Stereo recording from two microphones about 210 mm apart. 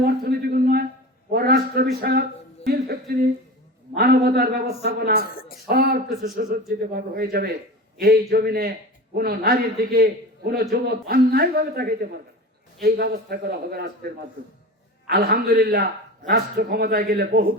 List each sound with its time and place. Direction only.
0.0 s a sound: 45° right (ahead or behind)
2.6 s a man's voice: 45° right (ahead or behind)
5.2 s a woman's voice: 45° left (ahead or behind)
5.6 s a man's voice: 45° right (ahead or behind)